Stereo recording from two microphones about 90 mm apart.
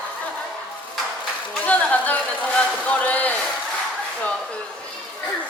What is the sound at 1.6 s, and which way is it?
A woman's voice, 15° left (ahead or behind).